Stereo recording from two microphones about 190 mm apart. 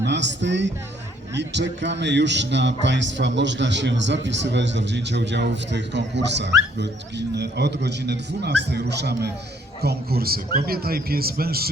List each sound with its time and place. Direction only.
0.1 s a man's voice: 70° right (ahead or behind)